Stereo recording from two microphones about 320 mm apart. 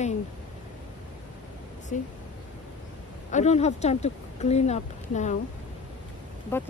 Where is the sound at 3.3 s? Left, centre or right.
Left.